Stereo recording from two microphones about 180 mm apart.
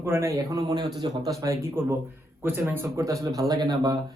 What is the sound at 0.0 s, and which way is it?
Speech, 15° right (ahead or behind).